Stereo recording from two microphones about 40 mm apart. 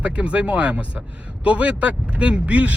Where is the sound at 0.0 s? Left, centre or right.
Right.